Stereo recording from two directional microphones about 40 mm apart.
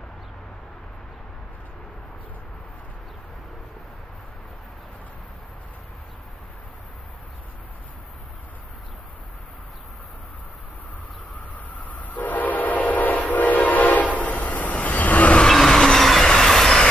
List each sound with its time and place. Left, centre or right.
11.5 s train: left
15.4 s train: centre